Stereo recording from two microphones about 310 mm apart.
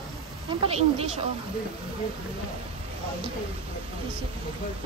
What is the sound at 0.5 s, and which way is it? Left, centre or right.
Speech, centre.